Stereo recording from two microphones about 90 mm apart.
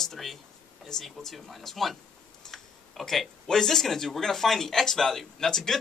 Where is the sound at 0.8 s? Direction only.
5° left (ahead or behind).